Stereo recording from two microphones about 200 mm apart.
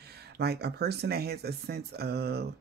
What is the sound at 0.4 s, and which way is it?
Speech, 55° right (ahead or behind).